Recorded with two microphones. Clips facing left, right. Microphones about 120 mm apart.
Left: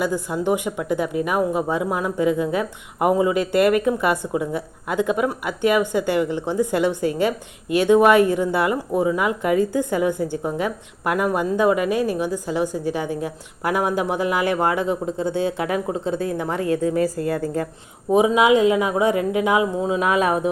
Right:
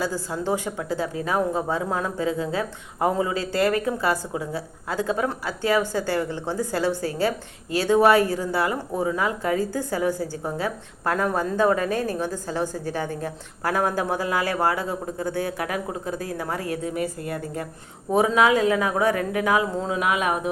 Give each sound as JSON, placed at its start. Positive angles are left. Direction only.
{"t": 0.0, "sound": "a woman's voice", "side_deg": 15}
{"t": 17.4, "sound": "music", "side_deg": 30}
{"t": 18.1, "sound": "speech", "side_deg": 15}
{"t": 20.0, "sound": "music", "side_deg": 35}